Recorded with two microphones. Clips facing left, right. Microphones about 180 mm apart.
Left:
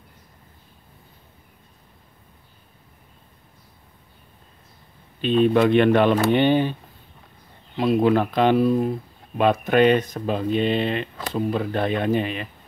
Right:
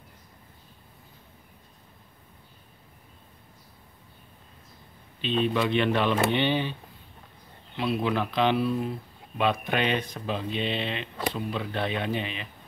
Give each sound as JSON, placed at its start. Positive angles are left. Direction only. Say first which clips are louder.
{"t": 5.2, "sound": "speech", "louder": "left 8 dB", "side_deg": 50}